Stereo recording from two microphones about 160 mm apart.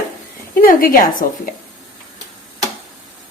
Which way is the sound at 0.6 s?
60° left (ahead or behind).